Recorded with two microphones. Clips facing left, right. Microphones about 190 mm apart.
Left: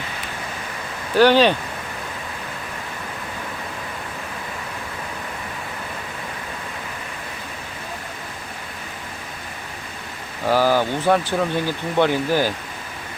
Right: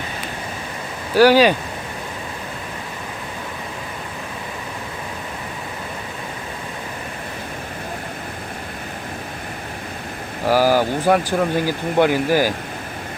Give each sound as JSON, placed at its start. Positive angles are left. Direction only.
{"t": 1.1, "sound": "speech", "side_deg": -10}
{"t": 10.5, "sound": "speech", "side_deg": -10}